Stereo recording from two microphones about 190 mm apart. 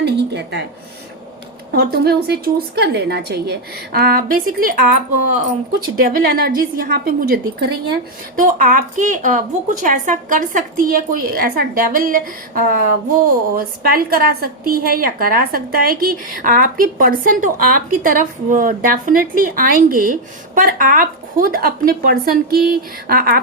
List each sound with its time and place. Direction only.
0.0 s a woman's voice: 65° right (ahead or behind)
1.7 s a woman's voice: 55° right (ahead or behind)